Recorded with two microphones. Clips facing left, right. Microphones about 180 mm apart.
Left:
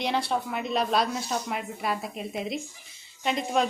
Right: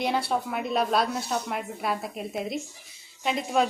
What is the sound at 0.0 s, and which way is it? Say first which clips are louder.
Speech: right 1 dB; 5° right (ahead or behind).